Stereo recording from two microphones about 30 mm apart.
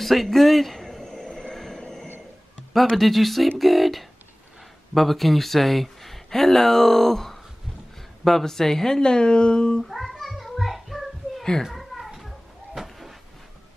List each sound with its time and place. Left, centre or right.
0.0 s speech: centre
1.0 s train: centre
1.8 s a sound: centre
2.9 s speech: centre; by 9.8 s left
9.8 s children playing: centre
11.7 s a sound: centre